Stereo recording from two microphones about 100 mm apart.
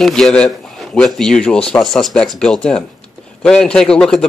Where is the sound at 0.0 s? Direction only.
5° left (ahead or behind).